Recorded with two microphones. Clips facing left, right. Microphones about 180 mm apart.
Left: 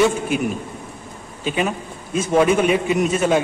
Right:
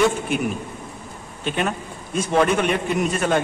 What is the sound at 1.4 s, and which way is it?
A man's voice, 5° left (ahead or behind).